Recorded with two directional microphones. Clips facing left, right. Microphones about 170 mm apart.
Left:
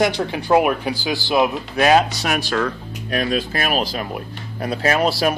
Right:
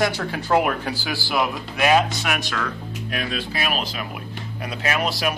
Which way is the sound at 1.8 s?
35° left (ahead or behind).